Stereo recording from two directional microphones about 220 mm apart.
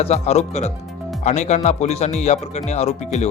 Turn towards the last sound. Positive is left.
turn(degrees=30)  # may be behind; listen again after turning